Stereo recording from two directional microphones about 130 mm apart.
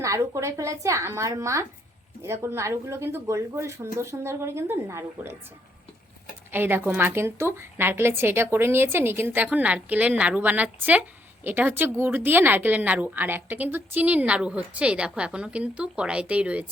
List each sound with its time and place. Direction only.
0.0 s speech: 25° right (ahead or behind)
6.5 s a woman's voice: 15° right (ahead or behind)